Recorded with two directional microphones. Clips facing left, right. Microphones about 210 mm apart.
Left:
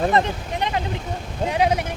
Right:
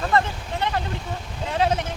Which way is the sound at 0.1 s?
20° left (ahead or behind).